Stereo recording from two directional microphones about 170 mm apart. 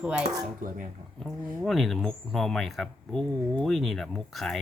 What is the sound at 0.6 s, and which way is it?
Dishes, 50° right (ahead or behind).